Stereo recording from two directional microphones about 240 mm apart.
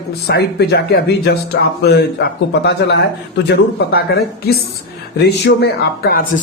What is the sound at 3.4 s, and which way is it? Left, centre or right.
A man's voice, left.